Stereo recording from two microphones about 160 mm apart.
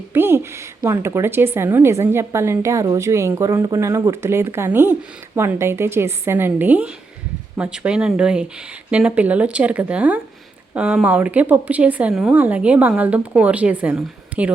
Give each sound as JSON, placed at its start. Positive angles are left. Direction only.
{"t": 0.1, "sound": "speech", "side_deg": -15}